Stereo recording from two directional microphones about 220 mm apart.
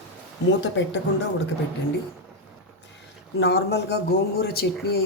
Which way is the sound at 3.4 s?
50° left (ahead or behind).